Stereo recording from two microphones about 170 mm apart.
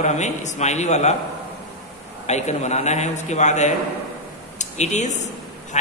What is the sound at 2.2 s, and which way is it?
A man's voice, 40° left (ahead or behind).